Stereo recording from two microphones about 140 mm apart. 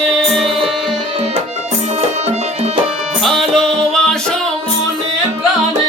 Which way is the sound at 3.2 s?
5° left (ahead or behind).